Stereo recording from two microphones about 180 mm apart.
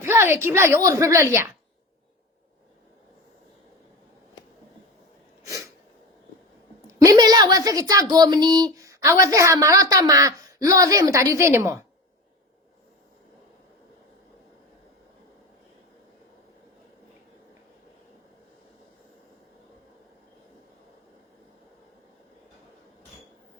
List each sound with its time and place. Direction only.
0.0 s a woman's voice: 15° right (ahead or behind)
6.8 s a woman's voice: 20° right (ahead or behind)